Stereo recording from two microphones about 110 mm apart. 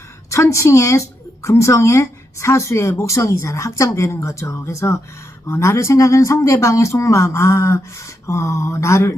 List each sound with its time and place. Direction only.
0.3 s a woman's voice: 25° left (ahead or behind)